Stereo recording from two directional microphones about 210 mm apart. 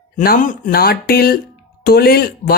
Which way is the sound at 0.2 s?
40° left (ahead or behind).